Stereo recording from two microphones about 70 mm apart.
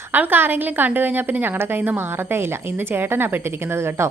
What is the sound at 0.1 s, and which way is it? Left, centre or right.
A woman's voice, right.